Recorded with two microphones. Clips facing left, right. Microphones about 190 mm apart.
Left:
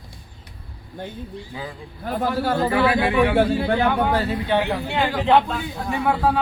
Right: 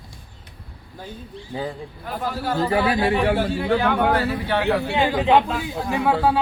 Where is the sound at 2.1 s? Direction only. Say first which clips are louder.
Left 4 dB; 55° left (ahead or behind).